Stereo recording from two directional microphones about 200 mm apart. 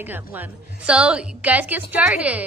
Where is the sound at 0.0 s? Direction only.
10° right (ahead or behind).